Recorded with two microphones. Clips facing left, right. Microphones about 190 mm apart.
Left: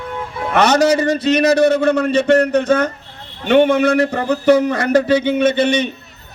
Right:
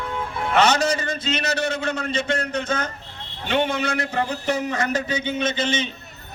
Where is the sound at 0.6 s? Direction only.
60° left (ahead or behind).